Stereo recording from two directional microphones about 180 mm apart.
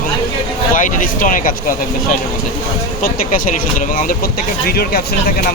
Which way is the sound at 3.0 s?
50° left (ahead or behind).